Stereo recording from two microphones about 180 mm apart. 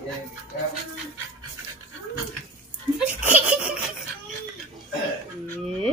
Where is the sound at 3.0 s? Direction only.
10° right (ahead or behind).